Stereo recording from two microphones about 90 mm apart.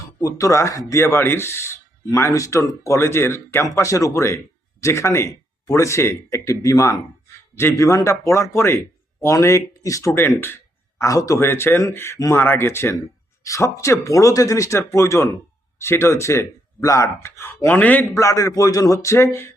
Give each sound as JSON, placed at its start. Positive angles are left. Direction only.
{"t": 0.2, "sound": "speech", "side_deg": 40}
{"t": 18.1, "sound": "speech", "side_deg": 35}